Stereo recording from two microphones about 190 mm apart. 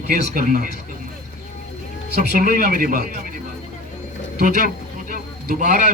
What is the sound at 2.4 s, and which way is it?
Speech, 50° right (ahead or behind).